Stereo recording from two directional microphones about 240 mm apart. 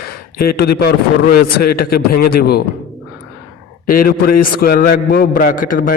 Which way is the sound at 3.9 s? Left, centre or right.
Left.